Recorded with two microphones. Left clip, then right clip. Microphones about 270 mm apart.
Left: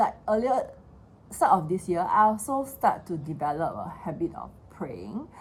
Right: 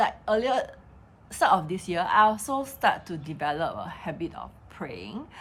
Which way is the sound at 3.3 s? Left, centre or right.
Right.